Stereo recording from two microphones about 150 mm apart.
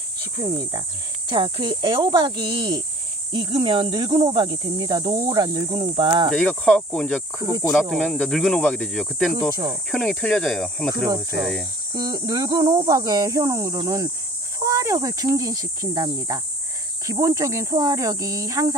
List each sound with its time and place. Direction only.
0.3 s speech: 25° right (ahead or behind)
6.3 s cricket: 5° left (ahead or behind)
7.3 s speech: 25° right (ahead or behind)
7.7 s cricket: 5° left (ahead or behind)
11.9 s speech: 25° right (ahead or behind)